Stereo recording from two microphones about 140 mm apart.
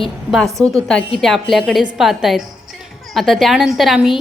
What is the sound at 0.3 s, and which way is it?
A woman's voice, centre (ahead or behind).